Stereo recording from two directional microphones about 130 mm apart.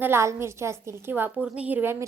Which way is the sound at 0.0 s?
20° right (ahead or behind).